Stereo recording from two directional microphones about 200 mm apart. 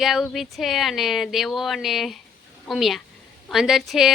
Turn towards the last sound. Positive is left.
turn(degrees=0)  # may be behind; listen again after turning